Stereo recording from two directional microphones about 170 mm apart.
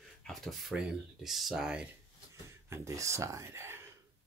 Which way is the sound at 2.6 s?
15° right (ahead or behind).